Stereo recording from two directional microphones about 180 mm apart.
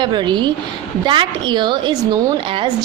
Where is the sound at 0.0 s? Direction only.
25° right (ahead or behind).